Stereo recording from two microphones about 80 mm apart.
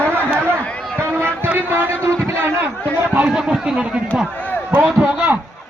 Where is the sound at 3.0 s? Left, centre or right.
Centre.